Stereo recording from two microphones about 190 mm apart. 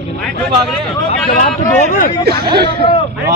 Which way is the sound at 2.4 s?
55° right (ahead or behind).